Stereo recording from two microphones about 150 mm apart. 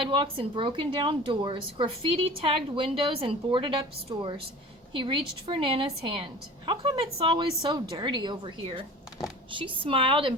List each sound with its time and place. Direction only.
0.0 s speech: 35° right (ahead or behind)